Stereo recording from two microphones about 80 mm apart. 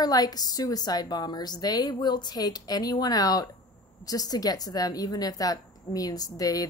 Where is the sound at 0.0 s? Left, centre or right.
Left.